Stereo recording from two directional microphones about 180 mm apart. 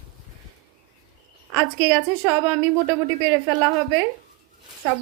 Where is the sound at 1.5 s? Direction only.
10° right (ahead or behind).